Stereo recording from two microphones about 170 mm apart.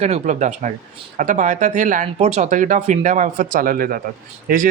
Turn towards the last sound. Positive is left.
turn(degrees=-50)  # may be behind; listen again after turning